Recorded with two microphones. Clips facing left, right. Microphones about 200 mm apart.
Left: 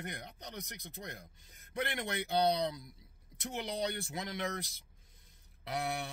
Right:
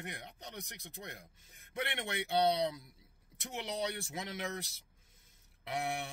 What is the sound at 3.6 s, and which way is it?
Speech, centre (ahead or behind).